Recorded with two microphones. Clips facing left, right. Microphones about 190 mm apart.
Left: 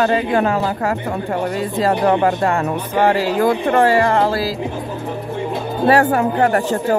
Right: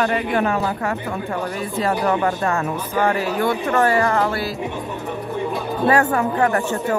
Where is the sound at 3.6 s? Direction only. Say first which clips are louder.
Left 2 dB; 30° left (ahead or behind).